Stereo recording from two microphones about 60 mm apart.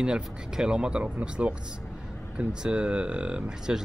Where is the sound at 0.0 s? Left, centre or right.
Centre.